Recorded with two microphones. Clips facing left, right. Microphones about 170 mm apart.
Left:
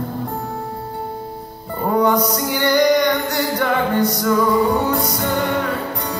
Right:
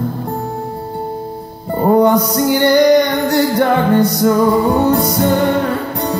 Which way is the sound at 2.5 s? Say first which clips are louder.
Right 6 dB; 30° right (ahead or behind).